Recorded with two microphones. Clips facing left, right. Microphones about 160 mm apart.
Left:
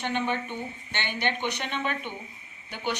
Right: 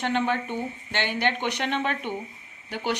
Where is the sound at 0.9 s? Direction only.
75° right (ahead or behind).